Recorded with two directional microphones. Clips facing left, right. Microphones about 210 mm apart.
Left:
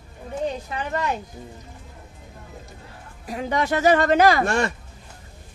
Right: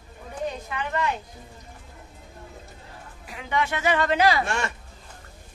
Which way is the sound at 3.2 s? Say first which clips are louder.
Left 4 dB; 40° left (ahead or behind).